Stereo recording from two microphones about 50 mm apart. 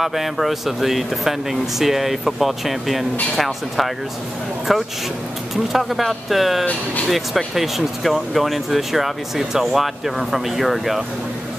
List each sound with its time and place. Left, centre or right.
0.0 s speech: centre